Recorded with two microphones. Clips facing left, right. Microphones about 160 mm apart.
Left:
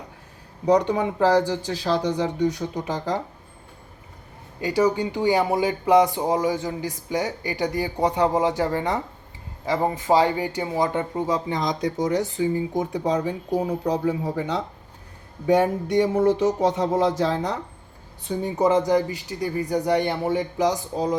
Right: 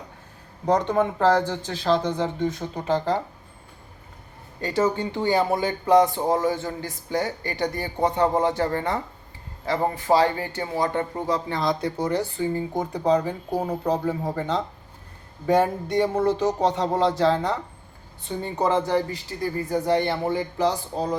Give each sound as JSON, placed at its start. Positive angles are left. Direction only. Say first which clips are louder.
{"t": 0.8, "sound": "speech", "louder": "even", "side_deg": 10}
{"t": 4.6, "sound": "speech", "louder": "left 2 dB", "side_deg": 10}